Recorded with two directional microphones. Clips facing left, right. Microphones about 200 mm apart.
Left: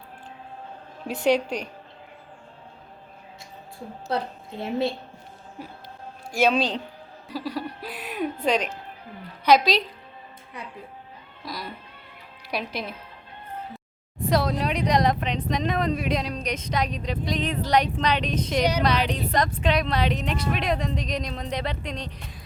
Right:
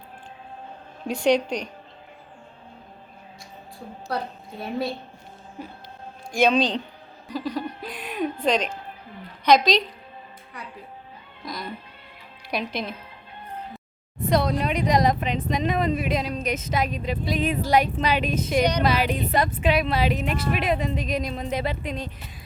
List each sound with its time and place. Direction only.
1.0 s a woman's voice: 5° left (ahead or behind)
4.1 s a woman's voice: 25° left (ahead or behind)
6.3 s speech: 5° left (ahead or behind)
7.3 s chuckle: 5° left (ahead or behind)
9.4 s a woman's voice: 5° left (ahead or behind)
11.4 s a woman's voice: 5° left (ahead or behind)